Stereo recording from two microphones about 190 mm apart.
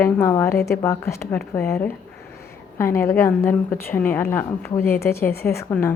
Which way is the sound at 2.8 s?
15° left (ahead or behind).